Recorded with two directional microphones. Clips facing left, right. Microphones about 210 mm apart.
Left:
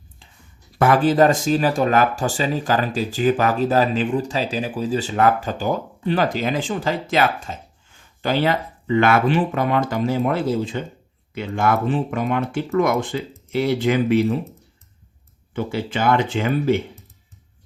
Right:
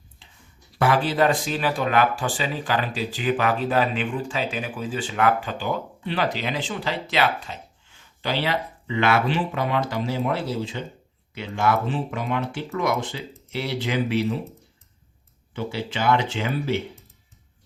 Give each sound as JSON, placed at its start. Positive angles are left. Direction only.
{"t": 0.2, "sound": "a sound", "side_deg": 45}
{"t": 0.8, "sound": "speech", "side_deg": 50}
{"t": 15.5, "sound": "speech", "side_deg": 50}